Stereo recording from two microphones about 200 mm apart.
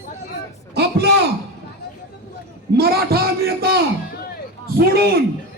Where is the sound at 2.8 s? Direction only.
50° right (ahead or behind).